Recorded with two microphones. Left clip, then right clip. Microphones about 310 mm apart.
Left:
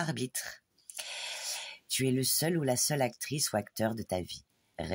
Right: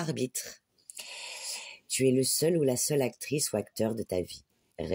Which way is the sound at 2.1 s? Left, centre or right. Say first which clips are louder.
Right 5 dB; left.